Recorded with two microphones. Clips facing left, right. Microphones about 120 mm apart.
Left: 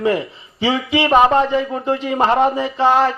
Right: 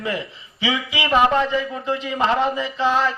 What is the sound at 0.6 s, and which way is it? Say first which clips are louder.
A man's voice: left 7 dB; 55° left (ahead or behind).